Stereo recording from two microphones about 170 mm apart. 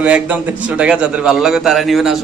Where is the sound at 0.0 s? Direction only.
5° right (ahead or behind).